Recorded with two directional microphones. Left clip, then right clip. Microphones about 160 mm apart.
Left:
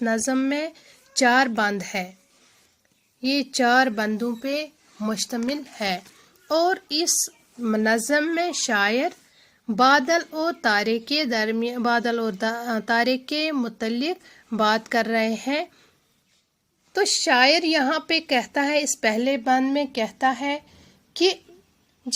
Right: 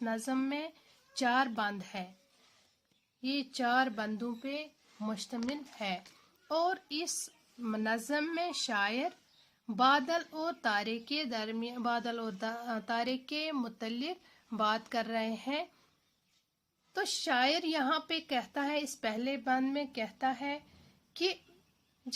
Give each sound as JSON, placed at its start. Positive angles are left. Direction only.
{"t": 0.0, "sound": "a woman's voice", "side_deg": 35}
{"t": 3.2, "sound": "a woman's voice", "side_deg": 40}
{"t": 17.2, "sound": "a woman's voice", "side_deg": 30}
{"t": 21.1, "sound": "a sound", "side_deg": 30}